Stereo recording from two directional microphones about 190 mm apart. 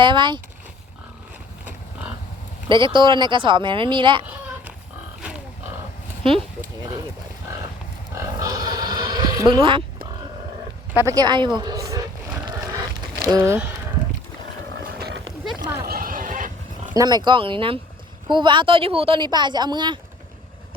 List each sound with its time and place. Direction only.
0.0 s speech: 25° right (ahead or behind)
2.6 s speech: 25° right (ahead or behind)
8.1 s a sound: 15° right (ahead or behind)
10.9 s speech: 15° right (ahead or behind)
13.2 s speech: 15° right (ahead or behind)
14.9 s a sound: 65° right (ahead or behind)
15.6 s a sound: 15° right (ahead or behind)
15.9 s neigh: 50° right (ahead or behind)
16.9 s speech: 20° right (ahead or behind)